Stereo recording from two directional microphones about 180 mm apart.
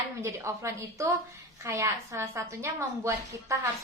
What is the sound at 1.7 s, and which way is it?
Speech, 15° right (ahead or behind).